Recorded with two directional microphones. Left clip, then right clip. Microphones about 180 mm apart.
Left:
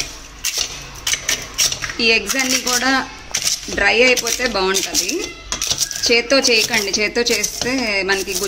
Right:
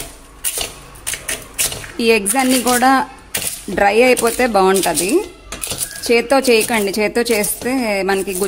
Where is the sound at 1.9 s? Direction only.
70° right (ahead or behind).